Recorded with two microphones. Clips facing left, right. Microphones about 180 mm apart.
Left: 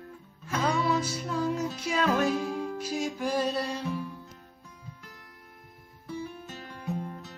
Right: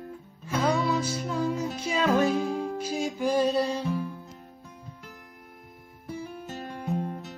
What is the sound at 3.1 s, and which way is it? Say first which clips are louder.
Music: right 7 dB; centre (ahead or behind).